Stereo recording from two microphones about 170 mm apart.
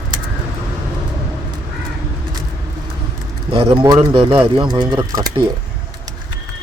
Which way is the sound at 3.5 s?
30° right (ahead or behind).